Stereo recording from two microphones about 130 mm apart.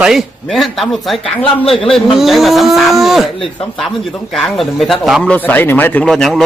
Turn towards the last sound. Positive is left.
turn(degrees=5)  # may be behind; listen again after turning